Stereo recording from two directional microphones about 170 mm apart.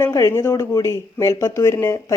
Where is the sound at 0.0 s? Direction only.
20° left (ahead or behind).